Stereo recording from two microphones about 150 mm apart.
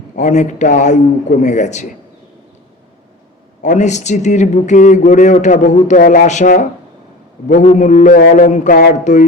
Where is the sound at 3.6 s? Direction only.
55° left (ahead or behind).